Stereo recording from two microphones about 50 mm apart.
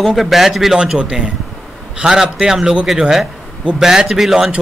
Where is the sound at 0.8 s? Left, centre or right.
Centre.